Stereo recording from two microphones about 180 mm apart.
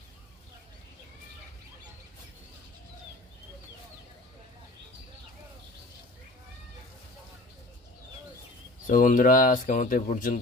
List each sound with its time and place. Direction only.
8.8 s speech: 45° left (ahead or behind)